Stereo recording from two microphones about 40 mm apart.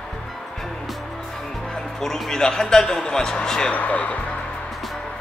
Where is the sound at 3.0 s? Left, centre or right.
Left.